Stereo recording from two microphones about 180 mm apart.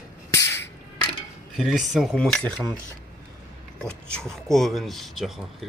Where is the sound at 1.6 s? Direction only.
5° right (ahead or behind).